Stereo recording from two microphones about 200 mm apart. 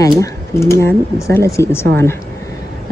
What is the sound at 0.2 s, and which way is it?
Speech, 15° left (ahead or behind).